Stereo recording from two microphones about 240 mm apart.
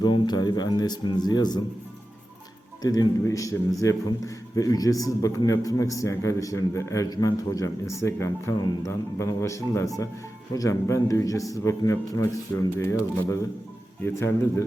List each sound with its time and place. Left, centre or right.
0.0 s a man's voice: centre
2.8 s a man's voice: centre
14.0 s a man's voice: centre